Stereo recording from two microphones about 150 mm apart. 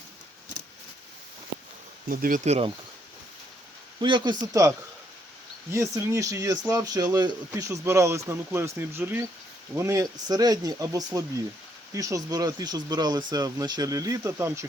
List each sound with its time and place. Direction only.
2.0 s speech: 70° right (ahead or behind)
2.4 s speech: 45° right (ahead or behind)
4.0 s speech: 30° right (ahead or behind)
5.7 s speech: 20° right (ahead or behind)